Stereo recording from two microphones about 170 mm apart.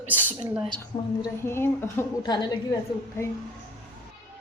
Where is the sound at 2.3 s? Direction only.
25° left (ahead or behind).